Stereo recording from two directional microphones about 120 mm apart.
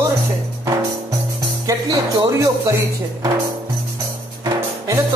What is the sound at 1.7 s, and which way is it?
Music, 30° right (ahead or behind).